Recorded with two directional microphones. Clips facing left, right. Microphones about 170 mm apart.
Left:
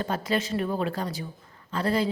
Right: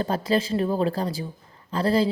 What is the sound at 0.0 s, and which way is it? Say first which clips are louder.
A woman's voice: right 4 dB; 35° right (ahead or behind).